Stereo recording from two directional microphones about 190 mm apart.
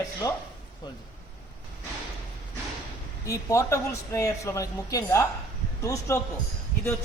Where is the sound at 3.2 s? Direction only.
15° left (ahead or behind).